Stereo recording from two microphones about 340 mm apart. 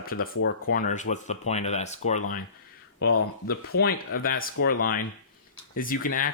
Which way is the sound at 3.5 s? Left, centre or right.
Left.